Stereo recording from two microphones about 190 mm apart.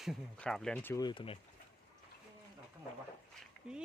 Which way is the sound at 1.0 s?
25° left (ahead or behind).